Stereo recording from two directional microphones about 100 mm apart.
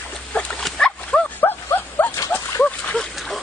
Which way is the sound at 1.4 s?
20° left (ahead or behind).